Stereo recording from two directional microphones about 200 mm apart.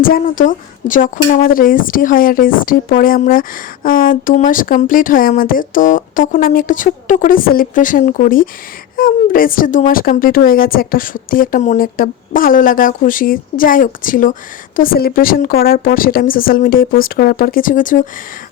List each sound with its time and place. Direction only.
0.0 s speech: 45° left (ahead or behind)